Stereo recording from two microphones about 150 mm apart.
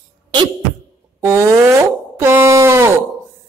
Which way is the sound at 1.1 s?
20° right (ahead or behind).